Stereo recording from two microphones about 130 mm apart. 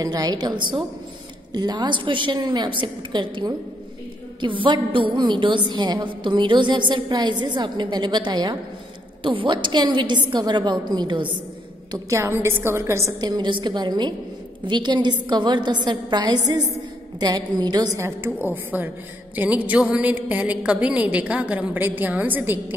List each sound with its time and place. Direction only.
0.0 s a woman's voice: 30° right (ahead or behind)
11.9 s a woman's voice: 20° right (ahead or behind)
13.2 s a woman's voice: 35° right (ahead or behind); by 22.8 s 15° right (ahead or behind)